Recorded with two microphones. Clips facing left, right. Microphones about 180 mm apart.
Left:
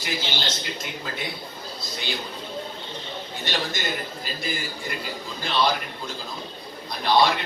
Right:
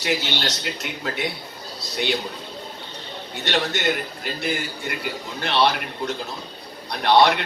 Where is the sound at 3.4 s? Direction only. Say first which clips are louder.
Right 6 dB; 70° right (ahead or behind).